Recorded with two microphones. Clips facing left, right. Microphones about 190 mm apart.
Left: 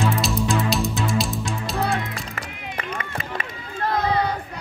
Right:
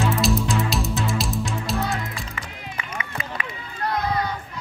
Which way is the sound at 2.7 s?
50° left (ahead or behind).